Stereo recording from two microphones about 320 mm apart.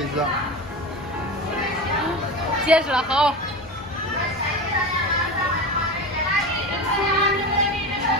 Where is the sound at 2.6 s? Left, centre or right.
Centre.